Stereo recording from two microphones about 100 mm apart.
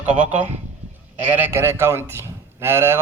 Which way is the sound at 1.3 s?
25° right (ahead or behind).